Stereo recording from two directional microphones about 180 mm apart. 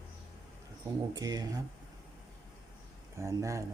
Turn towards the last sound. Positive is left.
turn(degrees=-15)  # may be behind; listen again after turning